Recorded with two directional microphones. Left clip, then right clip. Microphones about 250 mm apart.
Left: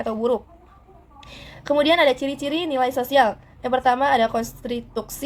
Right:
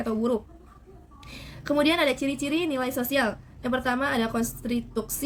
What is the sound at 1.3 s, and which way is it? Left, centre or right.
Speech, centre.